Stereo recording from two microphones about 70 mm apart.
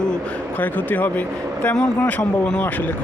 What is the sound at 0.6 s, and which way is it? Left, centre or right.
A man's voice, left.